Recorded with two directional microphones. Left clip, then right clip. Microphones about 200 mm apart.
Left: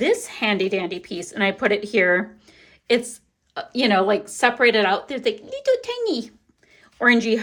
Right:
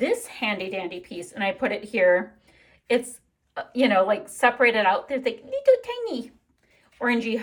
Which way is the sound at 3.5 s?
15° left (ahead or behind).